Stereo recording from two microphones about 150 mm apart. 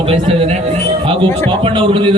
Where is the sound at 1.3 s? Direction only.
15° left (ahead or behind).